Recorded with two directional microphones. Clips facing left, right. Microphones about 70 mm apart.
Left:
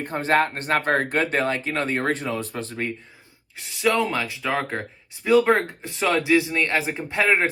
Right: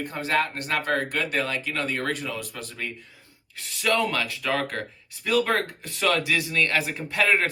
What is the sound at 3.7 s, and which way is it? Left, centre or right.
Speech, centre.